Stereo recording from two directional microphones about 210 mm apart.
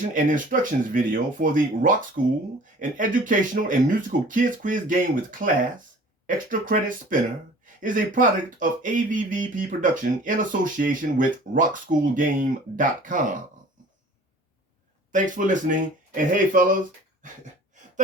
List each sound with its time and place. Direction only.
0.1 s speech: 40° right (ahead or behind)
15.1 s speech: 35° right (ahead or behind)